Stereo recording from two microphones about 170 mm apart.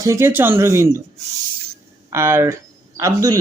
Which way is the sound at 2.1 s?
15° right (ahead or behind).